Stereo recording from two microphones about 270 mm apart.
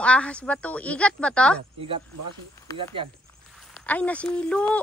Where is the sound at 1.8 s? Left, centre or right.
Centre.